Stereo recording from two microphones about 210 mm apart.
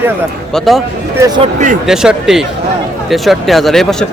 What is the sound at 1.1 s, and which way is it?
Speech, 15° right (ahead or behind).